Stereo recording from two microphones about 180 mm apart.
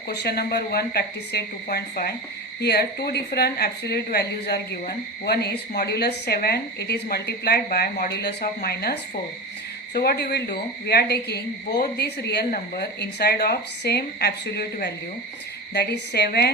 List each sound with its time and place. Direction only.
0.1 s a woman's voice: 60° left (ahead or behind)